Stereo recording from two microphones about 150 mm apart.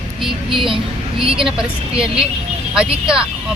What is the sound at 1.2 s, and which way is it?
Speech, 35° right (ahead or behind).